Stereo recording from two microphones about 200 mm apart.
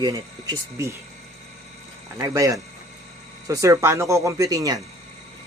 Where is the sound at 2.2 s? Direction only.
15° right (ahead or behind).